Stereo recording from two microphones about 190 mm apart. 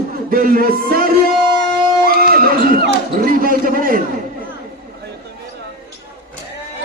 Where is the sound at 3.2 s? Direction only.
45° right (ahead or behind).